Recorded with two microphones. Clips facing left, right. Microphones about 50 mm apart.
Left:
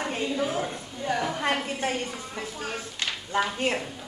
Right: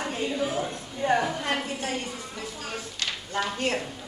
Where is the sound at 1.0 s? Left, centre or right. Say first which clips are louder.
Right 5 dB; right.